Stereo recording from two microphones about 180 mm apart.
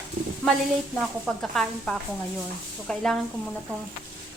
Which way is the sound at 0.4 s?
15° left (ahead or behind).